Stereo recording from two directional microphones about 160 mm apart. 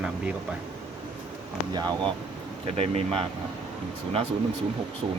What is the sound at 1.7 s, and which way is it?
Speech, 25° right (ahead or behind).